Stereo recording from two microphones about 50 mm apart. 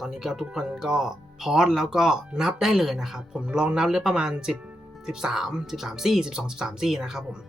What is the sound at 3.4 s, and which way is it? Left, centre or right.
Speech, centre.